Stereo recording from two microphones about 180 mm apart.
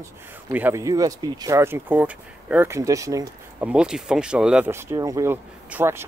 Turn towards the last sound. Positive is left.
turn(degrees=-15)  # may be behind; listen again after turning